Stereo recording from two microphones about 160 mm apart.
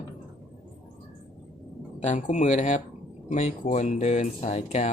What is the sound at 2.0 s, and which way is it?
Speech, 50° left (ahead or behind).